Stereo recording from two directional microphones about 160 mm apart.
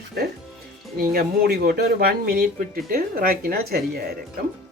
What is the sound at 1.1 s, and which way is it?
Speech, 80° right.